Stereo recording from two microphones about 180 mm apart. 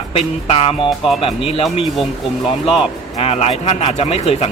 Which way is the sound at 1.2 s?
30° left (ahead or behind).